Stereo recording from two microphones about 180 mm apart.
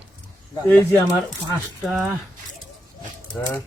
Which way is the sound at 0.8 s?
20° left (ahead or behind).